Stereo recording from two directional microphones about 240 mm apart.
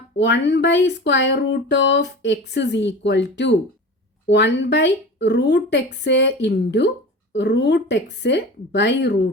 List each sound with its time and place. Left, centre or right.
0.2 s speech: left